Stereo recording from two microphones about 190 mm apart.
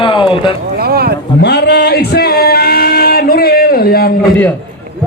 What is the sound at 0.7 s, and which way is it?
Speech, 55° right (ahead or behind).